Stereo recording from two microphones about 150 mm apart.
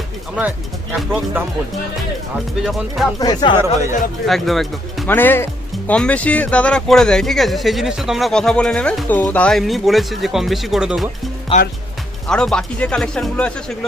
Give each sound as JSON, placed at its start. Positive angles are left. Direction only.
{"t": 0.9, "sound": "speech", "side_deg": -10}
{"t": 2.6, "sound": "speech", "side_deg": 0}
{"t": 3.2, "sound": "speech", "side_deg": 25}
{"t": 4.3, "sound": "speech", "side_deg": 0}
{"t": 5.0, "sound": "speech", "side_deg": 15}
{"t": 11.5, "sound": "speech", "side_deg": 40}
{"t": 12.3, "sound": "speech", "side_deg": 5}